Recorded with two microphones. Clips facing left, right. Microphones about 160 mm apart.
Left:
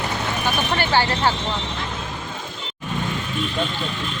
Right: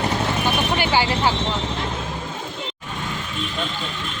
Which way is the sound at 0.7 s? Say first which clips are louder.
Even; 10° right (ahead or behind).